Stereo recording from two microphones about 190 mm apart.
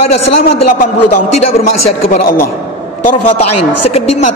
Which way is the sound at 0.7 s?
40° left (ahead or behind).